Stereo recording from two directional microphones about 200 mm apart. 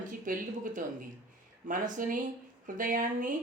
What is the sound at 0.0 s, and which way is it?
Speech, 40° right (ahead or behind).